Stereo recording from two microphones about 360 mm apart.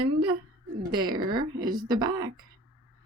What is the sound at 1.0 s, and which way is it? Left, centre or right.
Speech, centre.